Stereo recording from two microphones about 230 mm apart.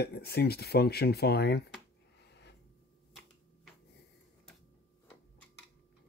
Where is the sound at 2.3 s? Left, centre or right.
Left.